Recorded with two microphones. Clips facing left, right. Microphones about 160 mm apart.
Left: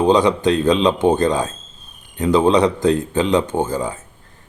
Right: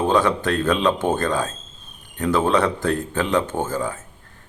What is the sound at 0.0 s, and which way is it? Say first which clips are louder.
Speech: left 5 dB; 15° left (ahead or behind).